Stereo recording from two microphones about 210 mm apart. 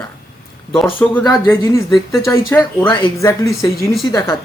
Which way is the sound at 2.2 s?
10° left (ahead or behind).